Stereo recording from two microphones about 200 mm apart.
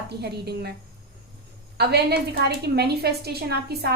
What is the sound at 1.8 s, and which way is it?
A woman's voice, 55° right (ahead or behind).